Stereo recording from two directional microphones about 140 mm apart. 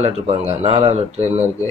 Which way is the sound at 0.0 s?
45° right (ahead or behind).